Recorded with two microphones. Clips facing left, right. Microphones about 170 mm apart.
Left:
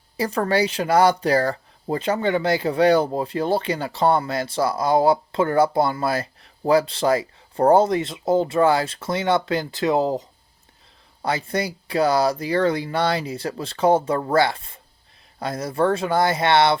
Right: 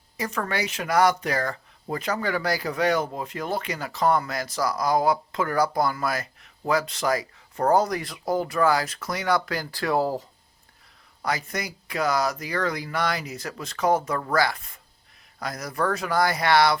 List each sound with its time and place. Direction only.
0.2 s speech: 35° left (ahead or behind)